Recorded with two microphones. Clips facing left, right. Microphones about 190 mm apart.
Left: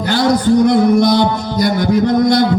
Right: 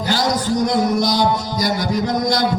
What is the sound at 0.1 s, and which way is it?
A man's voice, 55° left (ahead or behind).